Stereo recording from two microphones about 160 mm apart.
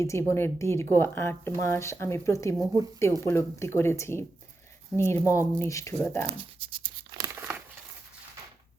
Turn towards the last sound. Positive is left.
turn(degrees=-10)  # may be behind; listen again after turning